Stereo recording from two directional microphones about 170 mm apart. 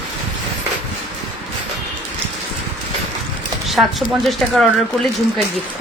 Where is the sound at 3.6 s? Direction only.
Centre (ahead or behind).